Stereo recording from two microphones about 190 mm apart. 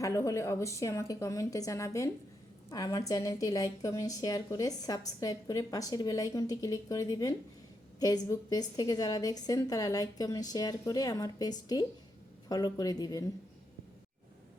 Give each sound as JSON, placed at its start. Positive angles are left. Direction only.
{"t": 0.0, "sound": "a woman's voice", "side_deg": 15}